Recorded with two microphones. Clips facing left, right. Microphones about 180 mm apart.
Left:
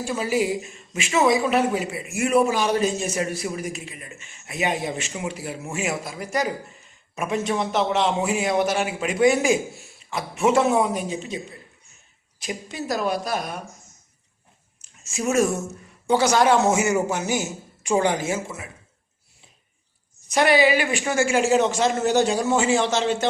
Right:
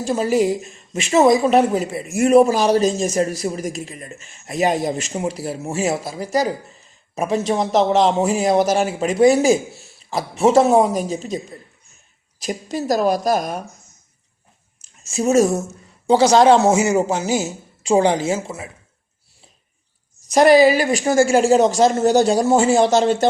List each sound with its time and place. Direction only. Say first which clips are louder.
0.1 s speech: right 6 dB; 40° right (ahead or behind)
15.1 s a woman's voice: right 6 dB; 35° right (ahead or behind)
20.3 s speech: right 7 dB; 40° right (ahead or behind)